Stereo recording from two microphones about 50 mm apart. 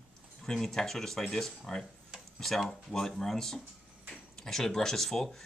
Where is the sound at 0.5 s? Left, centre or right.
Centre.